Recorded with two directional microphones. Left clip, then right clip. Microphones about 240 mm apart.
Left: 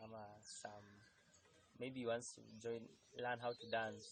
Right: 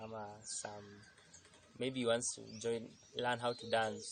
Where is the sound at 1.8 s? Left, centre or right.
Right.